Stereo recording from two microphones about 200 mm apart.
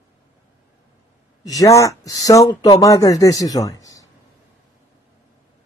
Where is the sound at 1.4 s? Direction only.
15° left (ahead or behind).